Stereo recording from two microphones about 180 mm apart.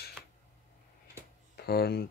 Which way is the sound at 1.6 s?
60° left (ahead or behind).